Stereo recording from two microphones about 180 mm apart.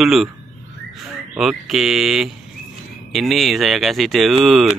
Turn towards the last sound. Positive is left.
turn(degrees=0)  # may be behind; listen again after turning